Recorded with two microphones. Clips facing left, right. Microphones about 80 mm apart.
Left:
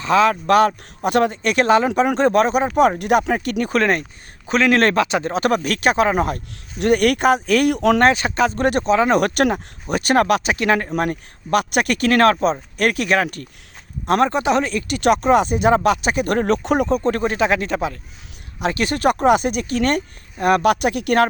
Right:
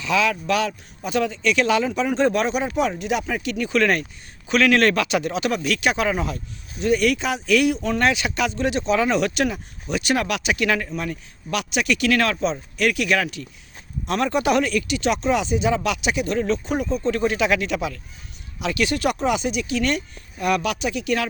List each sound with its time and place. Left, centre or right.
0.0 s speech: left
5.3 s speech: left
8.5 s speech: left
10.8 s speech: left
14.1 s speech: left
14.8 s speech: left
17.1 s speech: left